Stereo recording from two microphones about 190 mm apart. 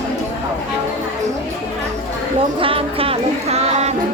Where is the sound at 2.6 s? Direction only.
30° right (ahead or behind).